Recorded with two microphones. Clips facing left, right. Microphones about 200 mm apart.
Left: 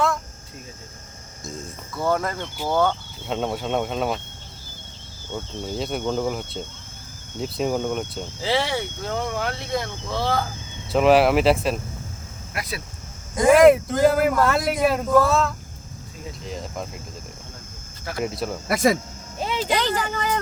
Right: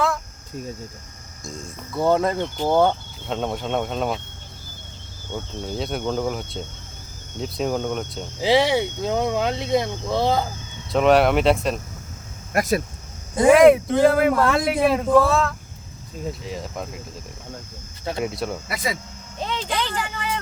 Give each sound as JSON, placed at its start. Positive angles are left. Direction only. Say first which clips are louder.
{"t": 1.9, "sound": "speech", "louder": "right 4 dB", "side_deg": -25}
{"t": 3.2, "sound": "a man's voice", "louder": "even", "side_deg": 5}
{"t": 5.6, "sound": "a man's voice", "louder": "even", "side_deg": 0}
{"t": 8.4, "sound": "speech", "louder": "right 6 dB", "side_deg": -15}
{"t": 10.9, "sound": "a man's voice", "louder": "even", "side_deg": 5}
{"t": 12.5, "sound": "speech", "louder": "right 11 dB", "side_deg": -45}
{"t": 13.4, "sound": "a man's voice", "louder": "right 1 dB", "side_deg": 0}
{"t": 18.2, "sound": "a man's voice", "louder": "left 1 dB", "side_deg": 0}
{"t": 18.7, "sound": "speech", "louder": "left 13 dB", "side_deg": 45}
{"t": 19.4, "sound": "a sound", "louder": "left 2 dB", "side_deg": 10}
{"t": 20.0, "sound": "a sound", "louder": "left 3 dB", "side_deg": 35}